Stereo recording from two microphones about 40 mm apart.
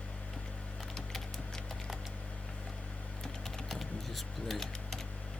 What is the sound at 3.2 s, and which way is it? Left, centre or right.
Typing, centre.